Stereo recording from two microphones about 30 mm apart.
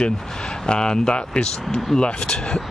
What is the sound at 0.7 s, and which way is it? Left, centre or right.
Speech, left.